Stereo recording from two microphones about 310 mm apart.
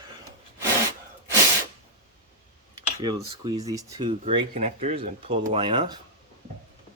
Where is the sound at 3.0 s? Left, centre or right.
Centre.